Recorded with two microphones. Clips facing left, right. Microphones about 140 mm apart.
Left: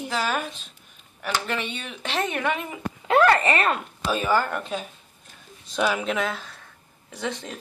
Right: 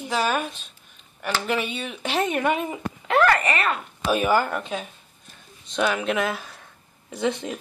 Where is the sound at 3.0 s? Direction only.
30° left (ahead or behind).